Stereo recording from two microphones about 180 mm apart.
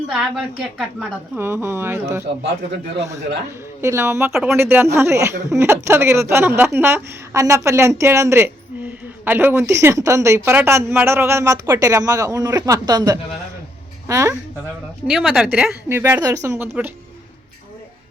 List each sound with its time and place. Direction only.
0.1 s a woman's voice: 5° right (ahead or behind)
3.8 s a woman's voice: 15° right (ahead or behind)
4.3 s a woman's voice: centre (ahead or behind)
4.5 s a woman's voice: 10° right (ahead or behind)
15.0 s a woman's voice: 5° right (ahead or behind)